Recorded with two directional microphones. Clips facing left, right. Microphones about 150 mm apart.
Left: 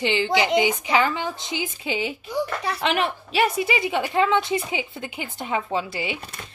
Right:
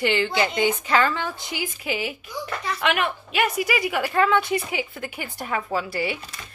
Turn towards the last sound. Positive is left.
turn(degrees=20)  # may be behind; listen again after turning